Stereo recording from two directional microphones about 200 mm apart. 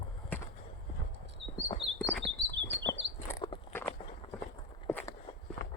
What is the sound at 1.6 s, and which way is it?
Chirp, 20° left (ahead or behind).